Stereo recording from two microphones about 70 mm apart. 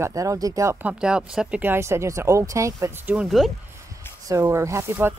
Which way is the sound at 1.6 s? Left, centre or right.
Right.